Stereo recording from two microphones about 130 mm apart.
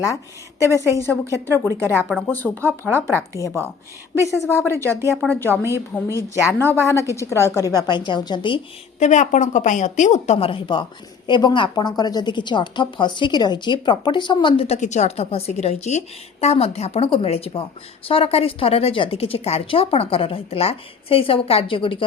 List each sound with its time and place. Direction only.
0.7 s a woman's voice: 20° left (ahead or behind)
7.7 s a woman's voice: 35° left (ahead or behind)
9.0 s a woman's voice: 65° left (ahead or behind); by 14.8 s 45° left (ahead or behind)
14.8 s speech: 60° left (ahead or behind); by 22.0 s 40° left (ahead or behind)